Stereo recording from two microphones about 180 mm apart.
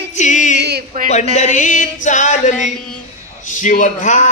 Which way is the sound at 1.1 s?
40° left (ahead or behind).